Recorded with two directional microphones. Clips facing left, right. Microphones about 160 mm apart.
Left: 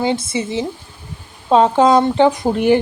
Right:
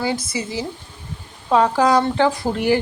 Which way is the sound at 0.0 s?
25° left (ahead or behind).